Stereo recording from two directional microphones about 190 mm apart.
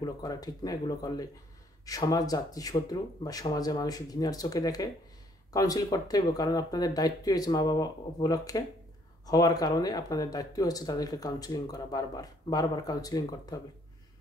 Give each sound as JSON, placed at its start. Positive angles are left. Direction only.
{"t": 0.0, "sound": "speech", "side_deg": 20}